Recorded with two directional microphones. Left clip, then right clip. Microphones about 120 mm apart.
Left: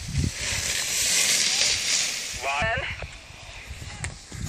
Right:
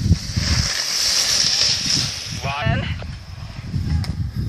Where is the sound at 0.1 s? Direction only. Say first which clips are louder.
Right 4 dB; 45° left (ahead or behind); by 2.4 s 25° left (ahead or behind).